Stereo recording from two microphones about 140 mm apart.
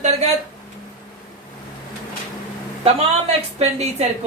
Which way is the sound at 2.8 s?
45° right (ahead or behind).